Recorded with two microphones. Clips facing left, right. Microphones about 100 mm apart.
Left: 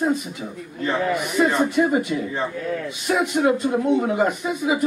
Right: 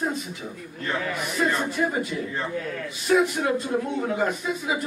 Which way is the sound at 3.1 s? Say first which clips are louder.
Left 2 dB; 20° left (ahead or behind).